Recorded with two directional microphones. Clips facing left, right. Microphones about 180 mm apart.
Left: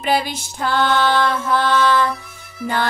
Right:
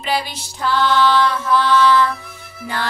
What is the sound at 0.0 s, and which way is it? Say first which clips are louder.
Music: left 3 dB; 50° left (ahead or behind).